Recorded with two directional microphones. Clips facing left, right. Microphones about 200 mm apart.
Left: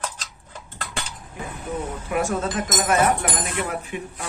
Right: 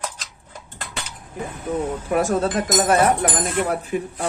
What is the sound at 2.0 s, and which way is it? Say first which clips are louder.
Speech: right 3 dB; 35° right (ahead or behind).